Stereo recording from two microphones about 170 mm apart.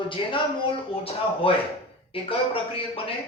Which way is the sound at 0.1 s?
30° left (ahead or behind).